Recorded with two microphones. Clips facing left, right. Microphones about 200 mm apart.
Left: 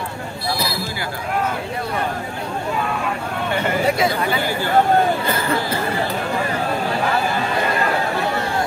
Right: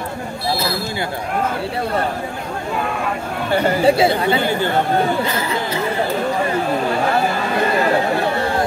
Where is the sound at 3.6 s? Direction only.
30° right (ahead or behind).